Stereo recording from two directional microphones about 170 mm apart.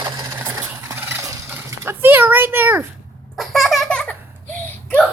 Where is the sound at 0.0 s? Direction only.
15° right (ahead or behind).